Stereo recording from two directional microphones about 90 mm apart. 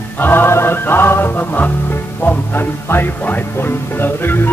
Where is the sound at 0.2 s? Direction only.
25° left (ahead or behind).